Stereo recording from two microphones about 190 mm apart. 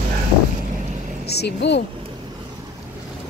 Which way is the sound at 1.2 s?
60° left (ahead or behind).